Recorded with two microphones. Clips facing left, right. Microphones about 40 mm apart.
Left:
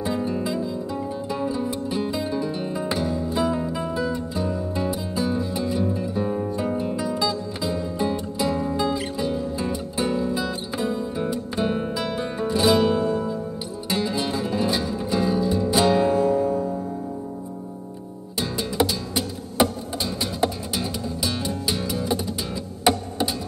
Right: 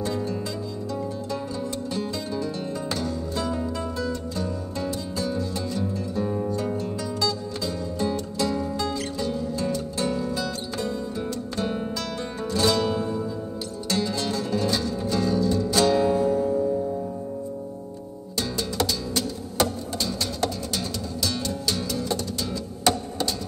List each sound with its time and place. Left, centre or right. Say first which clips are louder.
0.0 s music: left 3 dB; centre
16.2 s music: left 2 dB; left
18.3 s music: left 1 dB; centre